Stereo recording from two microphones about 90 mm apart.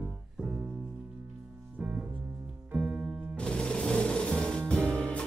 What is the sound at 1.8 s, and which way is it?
Piano, 15° right (ahead or behind).